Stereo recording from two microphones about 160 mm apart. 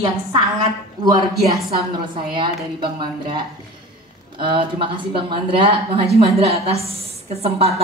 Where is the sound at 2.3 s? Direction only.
30° right (ahead or behind).